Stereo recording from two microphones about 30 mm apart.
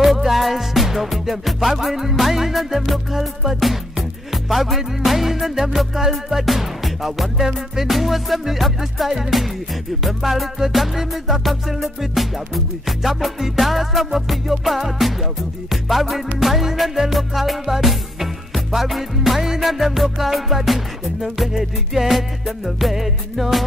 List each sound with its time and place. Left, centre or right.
0.0 s music: centre